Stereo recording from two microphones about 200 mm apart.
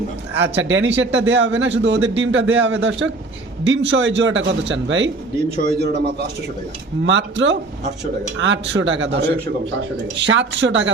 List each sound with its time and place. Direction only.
0.3 s speech: 65° right (ahead or behind)
5.6 s a man's voice: 55° right (ahead or behind)